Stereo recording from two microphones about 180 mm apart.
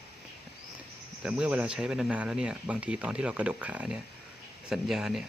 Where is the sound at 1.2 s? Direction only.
5° right (ahead or behind).